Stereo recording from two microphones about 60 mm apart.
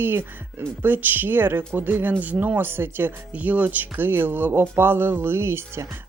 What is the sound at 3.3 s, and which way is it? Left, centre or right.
Speech, right.